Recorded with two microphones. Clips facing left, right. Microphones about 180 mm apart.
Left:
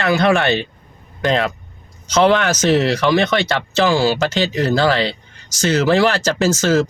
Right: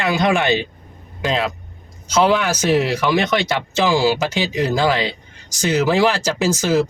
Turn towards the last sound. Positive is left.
turn(degrees=-15)  # may be behind; listen again after turning